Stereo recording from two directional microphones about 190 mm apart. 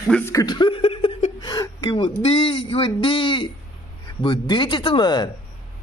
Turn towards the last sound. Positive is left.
turn(degrees=25)  # may be behind; listen again after turning